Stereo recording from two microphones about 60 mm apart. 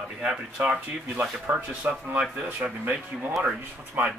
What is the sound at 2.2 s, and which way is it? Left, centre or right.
Speech, centre.